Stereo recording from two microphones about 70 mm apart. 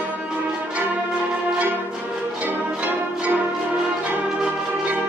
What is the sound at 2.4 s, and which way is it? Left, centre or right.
Music, right.